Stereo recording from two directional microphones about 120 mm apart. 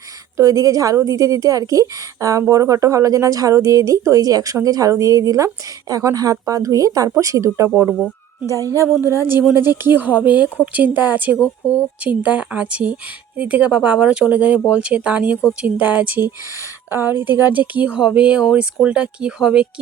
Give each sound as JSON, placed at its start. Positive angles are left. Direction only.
{"t": 0.3, "sound": "speech", "side_deg": -30}
{"t": 11.3, "sound": "speech", "side_deg": 20}
{"t": 12.0, "sound": "speech", "side_deg": -10}